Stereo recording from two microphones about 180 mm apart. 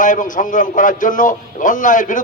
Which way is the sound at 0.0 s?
45° left (ahead or behind).